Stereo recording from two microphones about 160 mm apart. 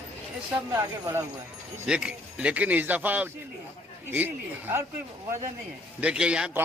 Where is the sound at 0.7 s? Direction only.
15° right (ahead or behind).